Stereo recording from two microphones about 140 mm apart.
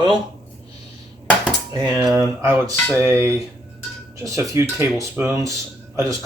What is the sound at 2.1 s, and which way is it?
Speech, 20° right (ahead or behind).